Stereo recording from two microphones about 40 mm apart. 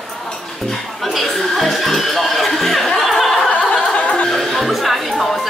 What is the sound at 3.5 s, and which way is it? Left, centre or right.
Music, left.